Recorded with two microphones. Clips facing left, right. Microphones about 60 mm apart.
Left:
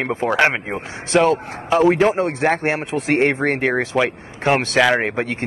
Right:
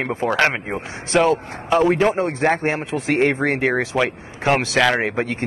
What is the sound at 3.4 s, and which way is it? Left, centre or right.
Speech, left.